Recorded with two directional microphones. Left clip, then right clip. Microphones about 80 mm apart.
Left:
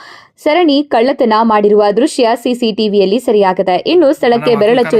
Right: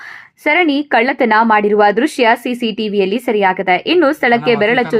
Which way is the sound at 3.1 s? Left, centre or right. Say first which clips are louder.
Left 4 dB; left.